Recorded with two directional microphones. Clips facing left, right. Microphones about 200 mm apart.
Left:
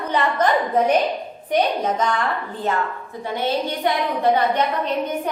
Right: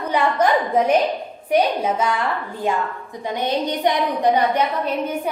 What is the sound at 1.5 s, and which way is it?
A woman's voice, 10° right (ahead or behind).